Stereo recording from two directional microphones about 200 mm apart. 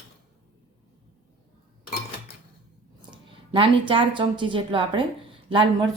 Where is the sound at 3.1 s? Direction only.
25° right (ahead or behind).